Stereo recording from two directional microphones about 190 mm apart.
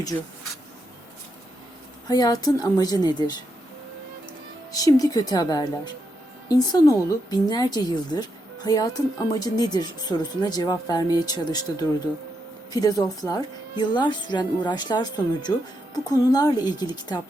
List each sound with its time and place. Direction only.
2.0 s a woman's voice: 20° left (ahead or behind)
4.7 s a woman's voice: 20° left (ahead or behind)